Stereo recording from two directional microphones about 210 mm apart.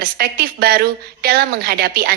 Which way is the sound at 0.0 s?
45° right (ahead or behind).